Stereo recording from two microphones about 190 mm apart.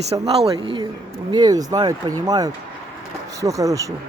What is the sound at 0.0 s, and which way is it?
Speech, 30° right (ahead or behind).